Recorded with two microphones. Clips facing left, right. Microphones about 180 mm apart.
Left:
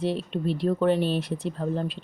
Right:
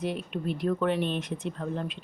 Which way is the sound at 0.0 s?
30° left (ahead or behind).